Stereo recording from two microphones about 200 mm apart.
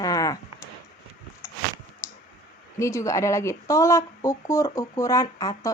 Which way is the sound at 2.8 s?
15° left (ahead or behind).